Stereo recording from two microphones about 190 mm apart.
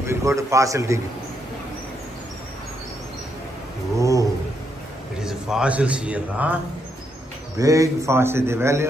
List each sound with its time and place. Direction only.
0.0 s a man's voice: 15° right (ahead or behind)
3.9 s a sound: 15° right (ahead or behind)
5.2 s a man's voice: 5° right (ahead or behind)